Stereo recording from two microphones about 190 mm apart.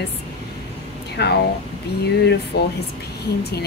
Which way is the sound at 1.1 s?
60° left (ahead or behind).